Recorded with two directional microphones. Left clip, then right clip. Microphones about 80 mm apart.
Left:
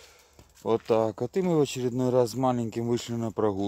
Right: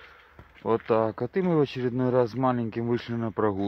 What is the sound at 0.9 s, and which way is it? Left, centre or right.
Speech, left.